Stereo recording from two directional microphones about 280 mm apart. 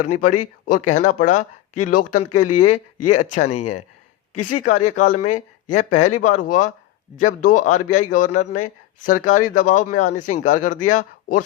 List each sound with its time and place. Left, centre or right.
0.2 s speech: left